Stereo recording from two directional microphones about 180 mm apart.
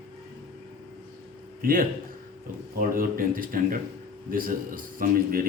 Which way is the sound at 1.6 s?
50° right (ahead or behind).